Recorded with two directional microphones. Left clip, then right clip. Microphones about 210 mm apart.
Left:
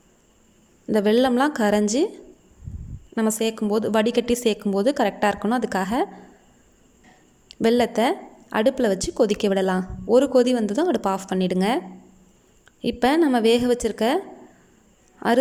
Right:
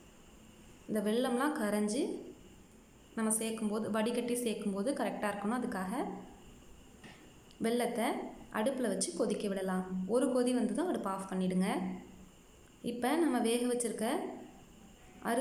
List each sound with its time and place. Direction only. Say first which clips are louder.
0.9 s a woman's voice: left 14 dB; 40° left (ahead or behind)
3.2 s a woman's voice: left 13 dB; 40° left (ahead or behind)
7.4 s a woman's voice: left 14 dB; 40° left (ahead or behind)
12.8 s a woman's voice: left 13 dB; 40° left (ahead or behind)